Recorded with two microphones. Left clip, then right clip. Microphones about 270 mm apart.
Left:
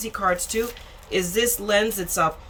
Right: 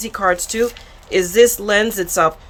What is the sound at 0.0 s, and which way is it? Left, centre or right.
Speech, centre.